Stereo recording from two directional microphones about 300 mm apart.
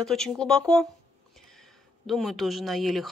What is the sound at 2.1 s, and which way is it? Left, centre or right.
Speech, centre.